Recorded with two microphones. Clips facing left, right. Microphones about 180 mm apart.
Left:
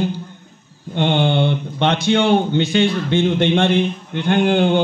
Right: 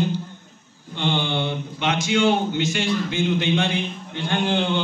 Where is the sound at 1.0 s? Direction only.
60° left (ahead or behind).